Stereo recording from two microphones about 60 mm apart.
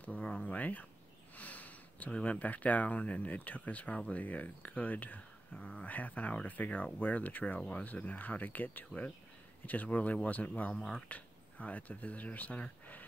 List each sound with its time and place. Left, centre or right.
0.0 s speech: left
1.3 s sniff: left
2.1 s speech: left